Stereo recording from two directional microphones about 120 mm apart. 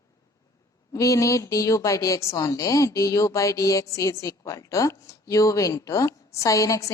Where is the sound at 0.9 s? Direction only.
25° left (ahead or behind).